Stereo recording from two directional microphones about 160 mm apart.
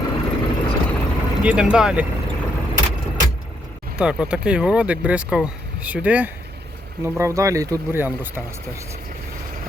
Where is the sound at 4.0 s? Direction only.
5° right (ahead or behind).